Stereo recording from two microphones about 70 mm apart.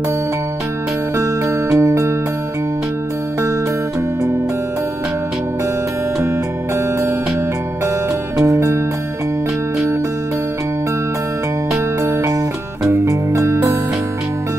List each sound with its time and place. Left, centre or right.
1.1 s music: right
8.4 s music: right
11.7 s music: right